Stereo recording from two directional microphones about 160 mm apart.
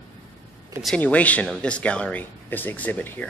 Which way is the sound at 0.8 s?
5° left (ahead or behind).